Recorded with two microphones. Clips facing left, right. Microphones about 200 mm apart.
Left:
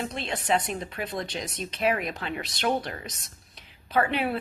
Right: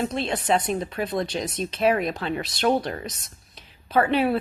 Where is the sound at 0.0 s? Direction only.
45° right (ahead or behind).